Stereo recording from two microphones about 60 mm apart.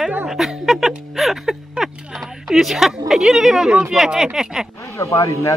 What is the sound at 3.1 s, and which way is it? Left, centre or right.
A woman's voice, centre.